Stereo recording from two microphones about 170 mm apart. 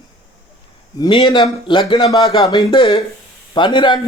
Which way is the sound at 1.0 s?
25° left (ahead or behind).